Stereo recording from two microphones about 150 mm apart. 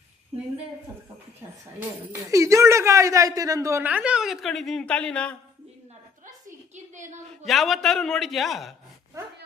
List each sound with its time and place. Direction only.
2.1 s a man's voice: 20° right (ahead or behind); by 5.4 s 5° left (ahead or behind)
6.9 s a woman's voice: 55° right (ahead or behind)
7.3 s a man's voice: centre (ahead or behind)